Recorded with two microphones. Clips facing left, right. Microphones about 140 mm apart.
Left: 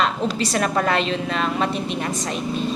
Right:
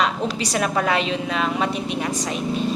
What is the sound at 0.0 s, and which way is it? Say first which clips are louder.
A woman's voice: left 1 dB; 10° right (ahead or behind).